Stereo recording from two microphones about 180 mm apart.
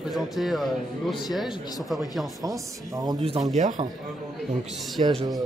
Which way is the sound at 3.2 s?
30° right (ahead or behind).